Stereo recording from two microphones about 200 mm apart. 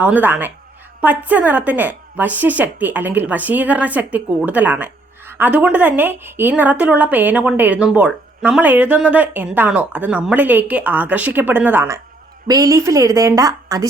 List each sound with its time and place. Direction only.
0.0 s a woman's voice: 10° right (ahead or behind)